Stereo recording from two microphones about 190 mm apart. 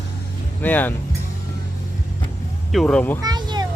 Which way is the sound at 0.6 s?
10° left (ahead or behind).